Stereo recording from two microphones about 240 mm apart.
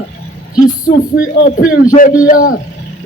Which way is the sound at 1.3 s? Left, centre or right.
Left.